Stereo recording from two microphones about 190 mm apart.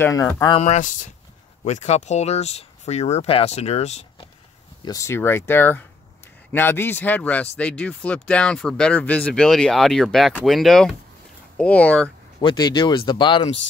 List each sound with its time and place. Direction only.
0.0 s speech: 15° left (ahead or behind)
0.6 s speech: 40° left (ahead or behind)
4.8 s speech: 15° left (ahead or behind)
12.4 s speech: 25° left (ahead or behind)